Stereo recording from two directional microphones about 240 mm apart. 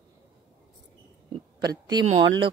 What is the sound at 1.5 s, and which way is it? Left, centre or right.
Speech, centre.